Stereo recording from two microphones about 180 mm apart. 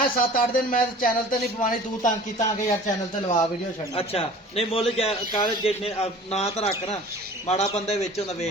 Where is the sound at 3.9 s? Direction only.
35° left (ahead or behind).